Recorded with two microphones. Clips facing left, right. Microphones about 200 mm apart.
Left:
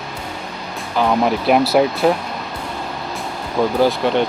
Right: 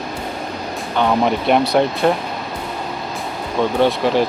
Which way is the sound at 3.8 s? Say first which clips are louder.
Right 1 dB; centre (ahead or behind).